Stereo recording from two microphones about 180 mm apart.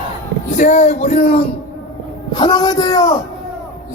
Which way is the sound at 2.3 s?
25° left (ahead or behind).